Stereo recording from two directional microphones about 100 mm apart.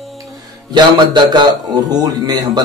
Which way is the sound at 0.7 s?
45° right (ahead or behind).